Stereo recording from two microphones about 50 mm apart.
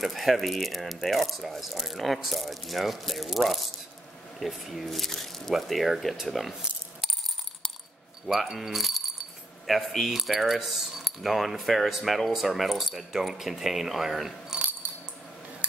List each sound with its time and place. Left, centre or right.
0.0 s speech: centre
8.3 s speech: centre
14.8 s coin: right